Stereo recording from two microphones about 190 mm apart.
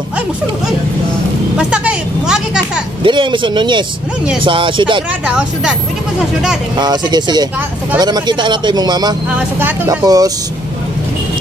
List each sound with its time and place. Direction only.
1.6 s vehicle: 5° right (ahead or behind)
3.0 s a man's voice: 25° right (ahead or behind)
5.2 s speech: 5° right (ahead or behind)
6.8 s a man's voice: 20° right (ahead or behind)
9.3 s speech: 10° right (ahead or behind)